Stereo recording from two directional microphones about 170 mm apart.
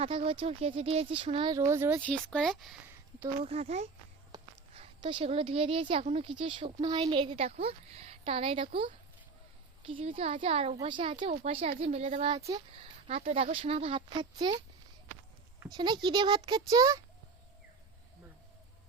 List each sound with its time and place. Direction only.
0.0 s a woman's voice: 30° right (ahead or behind)
1.5 s speech: 15° right (ahead or behind)
2.0 s speech: 5° left (ahead or behind)
3.4 s a woman's voice: 40° right (ahead or behind)
4.3 s a sound: 30° right (ahead or behind)
6.1 s a woman's voice: 35° right (ahead or behind)
15.6 s a child's voice: 25° right (ahead or behind)